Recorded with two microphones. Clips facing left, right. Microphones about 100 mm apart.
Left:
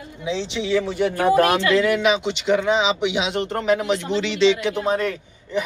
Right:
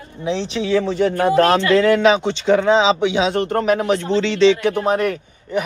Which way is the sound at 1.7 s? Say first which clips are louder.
Right 5 dB; 30° right (ahead or behind).